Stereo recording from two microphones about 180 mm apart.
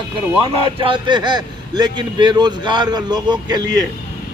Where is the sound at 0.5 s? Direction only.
30° right (ahead or behind).